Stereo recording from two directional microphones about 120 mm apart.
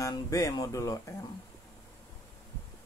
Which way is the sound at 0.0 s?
25° left (ahead or behind).